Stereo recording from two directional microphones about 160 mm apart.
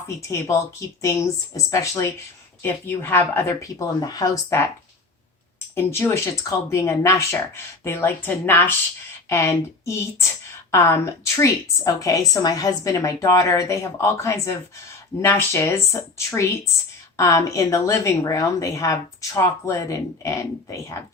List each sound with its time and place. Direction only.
0.2 s a woman's voice: 20° left (ahead or behind)
5.7 s a woman's voice: 15° left (ahead or behind)